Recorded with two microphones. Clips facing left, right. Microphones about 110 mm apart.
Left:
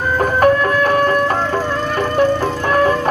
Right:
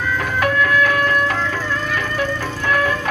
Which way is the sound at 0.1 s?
40° left (ahead or behind).